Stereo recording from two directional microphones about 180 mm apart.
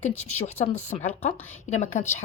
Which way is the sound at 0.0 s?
40° left (ahead or behind).